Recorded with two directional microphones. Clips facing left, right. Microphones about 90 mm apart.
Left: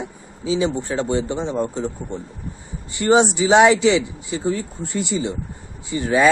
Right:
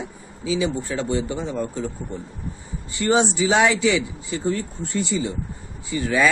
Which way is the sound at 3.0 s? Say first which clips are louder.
Left 4 dB; 20° left (ahead or behind).